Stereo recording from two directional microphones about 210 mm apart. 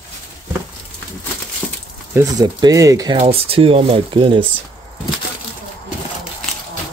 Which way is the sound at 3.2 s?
25° right (ahead or behind).